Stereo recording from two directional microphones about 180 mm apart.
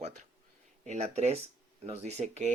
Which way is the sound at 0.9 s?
35° right (ahead or behind).